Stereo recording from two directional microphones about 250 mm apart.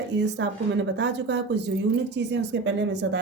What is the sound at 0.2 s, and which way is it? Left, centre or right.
A woman's voice, right.